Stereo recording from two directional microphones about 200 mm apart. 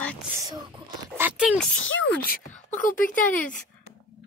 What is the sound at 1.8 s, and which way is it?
Speech, 70° left (ahead or behind).